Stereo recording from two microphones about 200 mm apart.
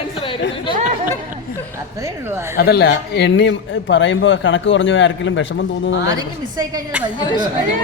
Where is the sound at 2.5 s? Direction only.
50° left (ahead or behind); by 5.4 s 70° left (ahead or behind).